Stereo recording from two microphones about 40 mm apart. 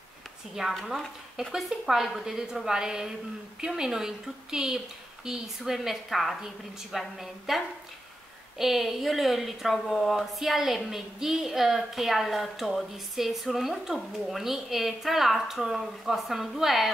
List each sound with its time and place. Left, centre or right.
0.6 s a woman's voice: centre
1.9 s a woman's voice: centre